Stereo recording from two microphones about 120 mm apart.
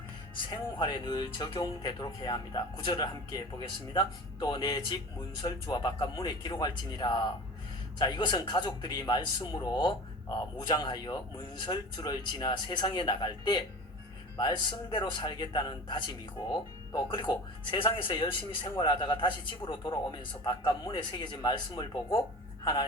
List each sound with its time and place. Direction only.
0.5 s speech: 40° left (ahead or behind)